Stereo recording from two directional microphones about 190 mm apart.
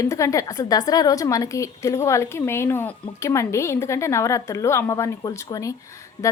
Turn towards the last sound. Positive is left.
turn(degrees=15)  # may be behind; listen again after turning